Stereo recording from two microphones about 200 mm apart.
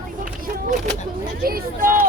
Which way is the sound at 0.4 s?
45° right (ahead or behind).